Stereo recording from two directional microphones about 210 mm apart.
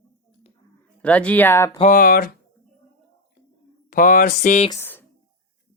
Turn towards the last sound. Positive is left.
turn(degrees=10)  # may be behind; listen again after turning